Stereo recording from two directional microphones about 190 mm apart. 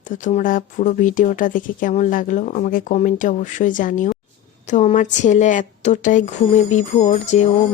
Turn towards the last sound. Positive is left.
turn(degrees=35)  # may be behind; listen again after turning